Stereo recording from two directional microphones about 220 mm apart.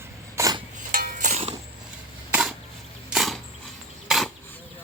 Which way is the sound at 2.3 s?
Centre (ahead or behind).